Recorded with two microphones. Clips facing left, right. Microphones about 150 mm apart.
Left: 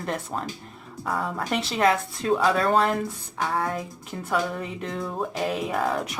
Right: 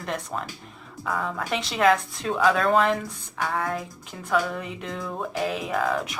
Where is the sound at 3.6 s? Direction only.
Centre (ahead or behind).